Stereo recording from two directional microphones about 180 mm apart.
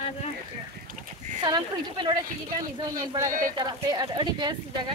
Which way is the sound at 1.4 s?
25° right (ahead or behind).